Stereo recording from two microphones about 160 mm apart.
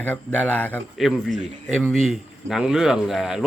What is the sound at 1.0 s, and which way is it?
Speech, centre (ahead or behind).